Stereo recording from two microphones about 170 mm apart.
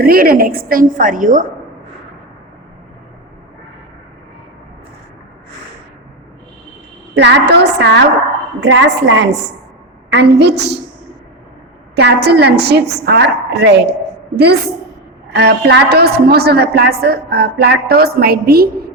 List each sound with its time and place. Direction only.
0.0 s a woman's voice: 60° right (ahead or behind)
7.2 s a woman's voice: 85° right
11.9 s a woman's voice: 75° right (ahead or behind)